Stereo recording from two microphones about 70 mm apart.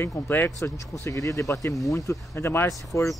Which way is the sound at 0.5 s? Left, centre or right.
Left.